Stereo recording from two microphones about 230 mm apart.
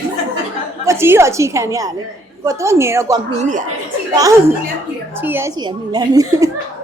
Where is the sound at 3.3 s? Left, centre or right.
Right.